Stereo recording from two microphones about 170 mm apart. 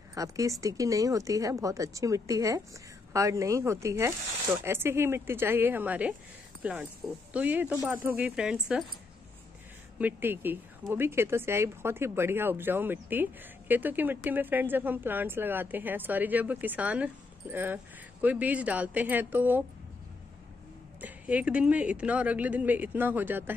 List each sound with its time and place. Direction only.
0.1 s speech: 20° right (ahead or behind)
9.9 s speech: 10° right (ahead or behind)
21.0 s speech: 10° right (ahead or behind)